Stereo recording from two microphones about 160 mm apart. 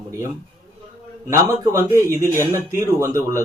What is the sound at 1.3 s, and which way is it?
Speech, 15° right (ahead or behind).